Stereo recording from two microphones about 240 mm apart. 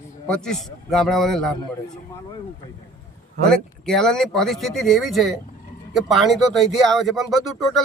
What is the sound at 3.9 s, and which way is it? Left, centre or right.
Speech, centre.